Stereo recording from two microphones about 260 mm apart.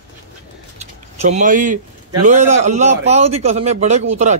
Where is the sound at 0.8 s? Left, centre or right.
Right.